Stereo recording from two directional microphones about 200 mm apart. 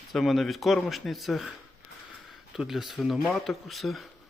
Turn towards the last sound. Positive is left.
turn(degrees=0)  # may be behind; listen again after turning